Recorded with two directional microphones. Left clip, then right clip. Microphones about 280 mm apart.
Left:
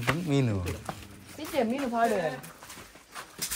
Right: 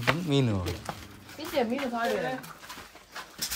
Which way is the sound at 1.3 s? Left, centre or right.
Left.